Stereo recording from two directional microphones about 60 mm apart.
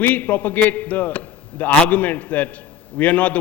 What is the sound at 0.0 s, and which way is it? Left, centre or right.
A man's voice, left.